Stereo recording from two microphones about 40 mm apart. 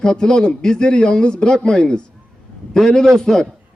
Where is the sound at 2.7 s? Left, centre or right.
Centre.